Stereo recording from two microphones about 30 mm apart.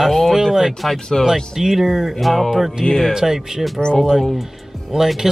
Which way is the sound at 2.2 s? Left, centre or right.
Centre.